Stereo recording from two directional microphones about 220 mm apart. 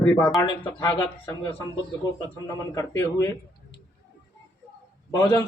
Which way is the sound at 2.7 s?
10° left (ahead or behind).